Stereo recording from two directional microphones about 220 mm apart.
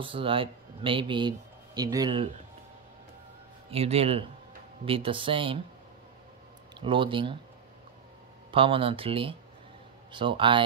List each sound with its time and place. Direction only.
0.0 s speech: 25° right (ahead or behind)
3.7 s speech: 25° right (ahead or behind)
6.7 s speech: 20° right (ahead or behind)
8.5 s speech: 25° right (ahead or behind)